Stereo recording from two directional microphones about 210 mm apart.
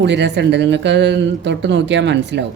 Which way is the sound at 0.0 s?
55° right (ahead or behind).